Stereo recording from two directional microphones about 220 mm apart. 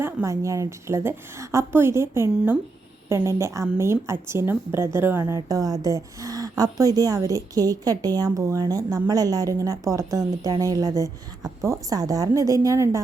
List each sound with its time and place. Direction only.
0.0 s a woman's voice: 10° right (ahead or behind)